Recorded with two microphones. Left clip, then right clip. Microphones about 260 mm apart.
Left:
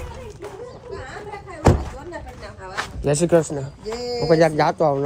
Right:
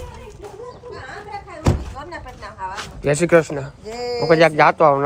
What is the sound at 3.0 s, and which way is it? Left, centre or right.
Speech, right.